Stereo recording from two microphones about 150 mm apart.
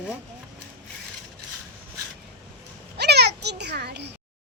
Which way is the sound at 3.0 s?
90° right.